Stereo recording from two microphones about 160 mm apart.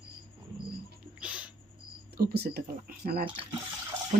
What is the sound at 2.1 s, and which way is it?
Speech, 80° right.